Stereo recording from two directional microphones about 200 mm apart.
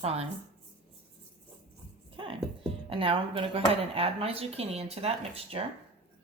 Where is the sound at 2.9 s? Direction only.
30° right (ahead or behind).